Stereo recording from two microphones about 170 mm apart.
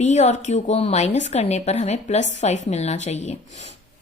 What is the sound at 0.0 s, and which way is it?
Speech, 40° left (ahead or behind).